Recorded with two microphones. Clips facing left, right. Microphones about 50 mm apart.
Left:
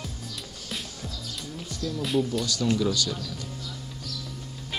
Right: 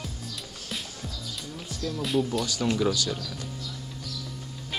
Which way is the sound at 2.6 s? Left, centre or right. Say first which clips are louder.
Even; right.